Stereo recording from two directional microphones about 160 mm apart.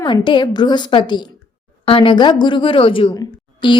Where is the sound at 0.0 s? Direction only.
30° left (ahead or behind).